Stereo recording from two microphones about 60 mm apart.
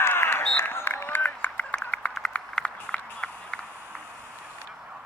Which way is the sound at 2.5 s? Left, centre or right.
Centre.